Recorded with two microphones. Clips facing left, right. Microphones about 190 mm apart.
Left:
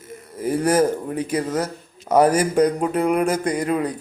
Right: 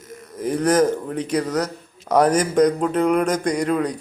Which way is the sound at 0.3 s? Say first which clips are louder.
Right 1 dB; 10° left (ahead or behind).